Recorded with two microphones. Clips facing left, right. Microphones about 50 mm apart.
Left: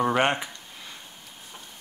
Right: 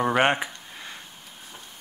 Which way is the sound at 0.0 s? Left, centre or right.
Centre.